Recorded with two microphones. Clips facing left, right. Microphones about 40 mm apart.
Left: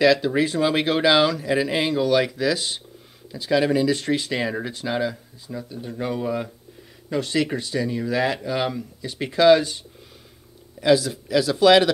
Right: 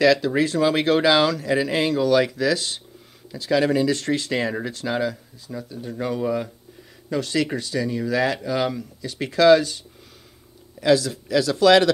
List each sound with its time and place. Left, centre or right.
0.0 s speech: left
5.5 s speech: centre